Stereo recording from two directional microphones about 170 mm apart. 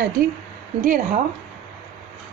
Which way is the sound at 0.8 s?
50° right (ahead or behind).